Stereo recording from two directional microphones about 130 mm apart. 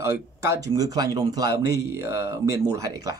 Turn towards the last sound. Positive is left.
turn(degrees=-25)  # may be behind; listen again after turning